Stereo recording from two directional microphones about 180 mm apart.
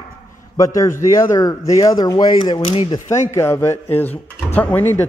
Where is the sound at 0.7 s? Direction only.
15° left (ahead or behind).